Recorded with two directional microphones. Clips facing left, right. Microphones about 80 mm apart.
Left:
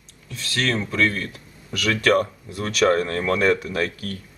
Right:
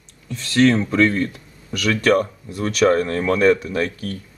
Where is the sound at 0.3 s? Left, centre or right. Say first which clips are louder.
Right 9 dB; centre.